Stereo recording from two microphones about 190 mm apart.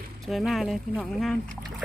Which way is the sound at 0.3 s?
Centre (ahead or behind).